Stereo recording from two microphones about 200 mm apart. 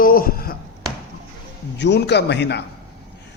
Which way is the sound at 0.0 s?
45° left (ahead or behind).